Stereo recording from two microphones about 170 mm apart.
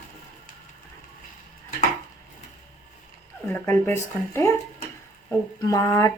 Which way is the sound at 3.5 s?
10° left (ahead or behind).